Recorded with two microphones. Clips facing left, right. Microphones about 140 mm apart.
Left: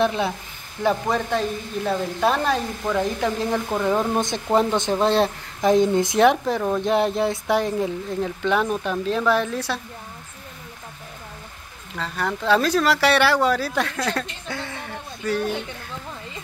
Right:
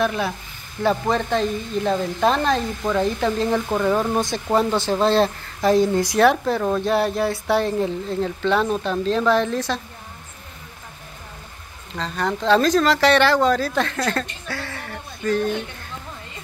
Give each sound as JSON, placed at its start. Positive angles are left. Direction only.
{"t": 0.0, "sound": "speech", "side_deg": 20}
{"t": 0.8, "sound": "speech", "side_deg": 10}
{"t": 3.4, "sound": "speech", "side_deg": -5}
{"t": 3.8, "sound": "speech", "side_deg": 5}
{"t": 4.5, "sound": "speech", "side_deg": -15}
{"t": 5.0, "sound": "speech", "side_deg": 15}
{"t": 12.0, "sound": "speech", "side_deg": 10}
{"t": 14.5, "sound": "a sound", "side_deg": 20}